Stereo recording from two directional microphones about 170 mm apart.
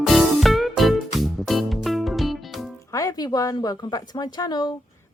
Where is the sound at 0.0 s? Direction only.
Centre (ahead or behind).